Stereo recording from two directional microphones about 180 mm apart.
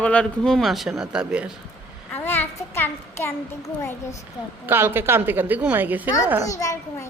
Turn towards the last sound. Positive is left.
turn(degrees=15)  # may be behind; listen again after turning